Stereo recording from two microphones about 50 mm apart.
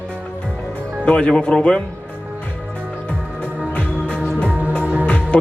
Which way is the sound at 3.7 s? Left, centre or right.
Left.